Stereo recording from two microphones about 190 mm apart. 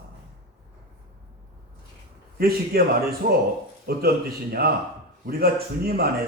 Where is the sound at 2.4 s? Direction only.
55° right (ahead or behind).